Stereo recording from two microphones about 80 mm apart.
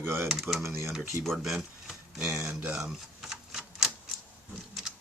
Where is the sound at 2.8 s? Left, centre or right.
Centre.